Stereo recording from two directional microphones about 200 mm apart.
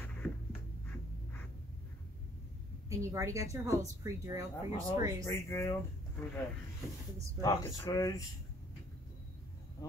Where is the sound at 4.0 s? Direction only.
15° right (ahead or behind).